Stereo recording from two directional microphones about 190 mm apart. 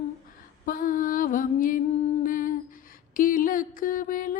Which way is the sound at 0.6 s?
45° left (ahead or behind).